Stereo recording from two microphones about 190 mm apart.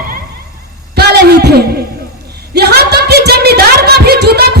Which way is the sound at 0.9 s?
55° right (ahead or behind).